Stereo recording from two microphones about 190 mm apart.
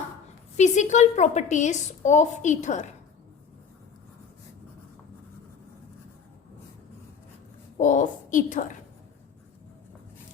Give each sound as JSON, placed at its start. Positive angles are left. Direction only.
{"t": 0.5, "sound": "a woman's voice", "side_deg": 40}
{"t": 7.8, "sound": "a woman's voice", "side_deg": 40}